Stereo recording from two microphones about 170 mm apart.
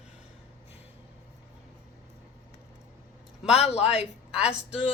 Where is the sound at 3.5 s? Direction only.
40° left (ahead or behind).